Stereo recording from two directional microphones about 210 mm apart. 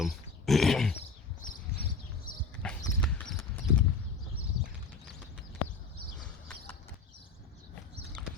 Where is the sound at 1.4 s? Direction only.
40° left (ahead or behind).